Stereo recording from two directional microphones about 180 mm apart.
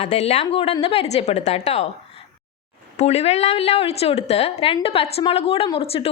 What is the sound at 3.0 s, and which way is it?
A woman's voice, 35° left (ahead or behind).